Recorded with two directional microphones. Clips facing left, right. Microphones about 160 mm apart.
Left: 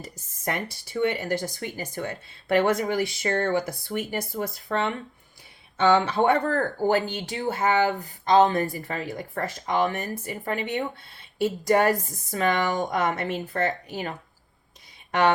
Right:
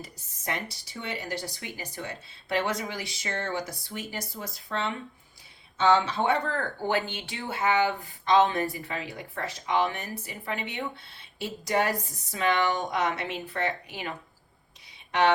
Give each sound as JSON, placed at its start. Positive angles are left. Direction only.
{"t": 0.0, "sound": "speech", "side_deg": 50}